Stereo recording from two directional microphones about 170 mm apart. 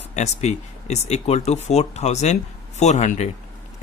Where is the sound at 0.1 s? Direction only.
40° left (ahead or behind).